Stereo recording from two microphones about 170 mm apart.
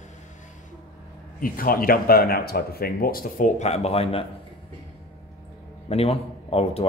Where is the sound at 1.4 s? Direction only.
55° left (ahead or behind); by 4.3 s 35° left (ahead or behind).